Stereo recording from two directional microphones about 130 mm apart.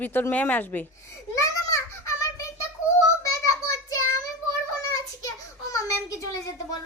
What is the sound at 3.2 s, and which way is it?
Child singing, 25° left (ahead or behind).